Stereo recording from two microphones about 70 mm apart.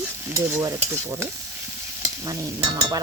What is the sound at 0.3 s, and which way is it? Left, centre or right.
Stir, right.